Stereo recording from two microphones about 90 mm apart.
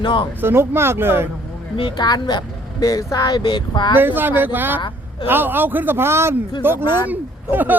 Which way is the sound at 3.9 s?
20° right (ahead or behind).